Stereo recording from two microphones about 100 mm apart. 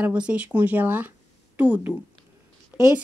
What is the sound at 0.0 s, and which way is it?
A woman's voice, 10° right (ahead or behind).